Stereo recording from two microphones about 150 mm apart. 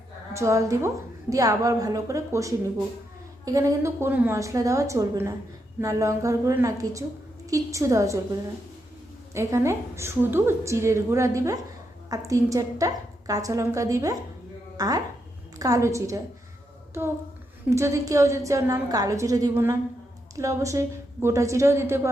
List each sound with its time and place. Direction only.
0.3 s a woman's voice: 20° right (ahead or behind)
9.3 s a woman's voice: 20° right (ahead or behind)
17.7 s a woman's voice: 20° right (ahead or behind)